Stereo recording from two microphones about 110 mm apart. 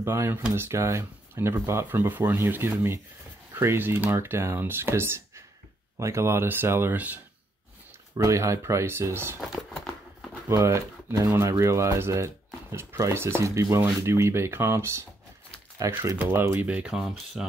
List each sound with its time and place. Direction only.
0.0 s speech: 25° right (ahead or behind)
8.2 s speech: 25° right (ahead or behind)
10.6 s speech: 25° right (ahead or behind)
16.2 s speech: 15° right (ahead or behind)